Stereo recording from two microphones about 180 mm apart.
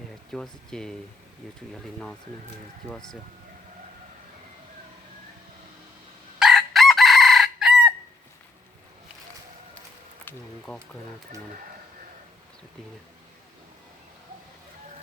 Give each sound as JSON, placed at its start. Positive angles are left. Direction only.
{"t": 0.3, "sound": "speech", "side_deg": 5}
{"t": 2.9, "sound": "speech", "side_deg": 5}
{"t": 6.4, "sound": "chicken", "side_deg": 0}
{"t": 10.7, "sound": "speech", "side_deg": 5}